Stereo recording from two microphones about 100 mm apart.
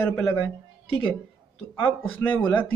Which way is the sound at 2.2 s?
15° left (ahead or behind).